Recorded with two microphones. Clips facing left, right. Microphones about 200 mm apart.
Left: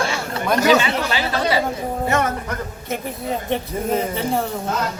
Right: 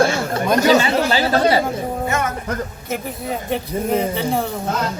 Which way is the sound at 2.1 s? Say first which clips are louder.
Left 4 dB; 35° left (ahead or behind).